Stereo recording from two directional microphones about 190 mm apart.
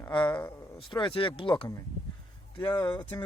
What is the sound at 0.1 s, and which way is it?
Speech, 25° left (ahead or behind).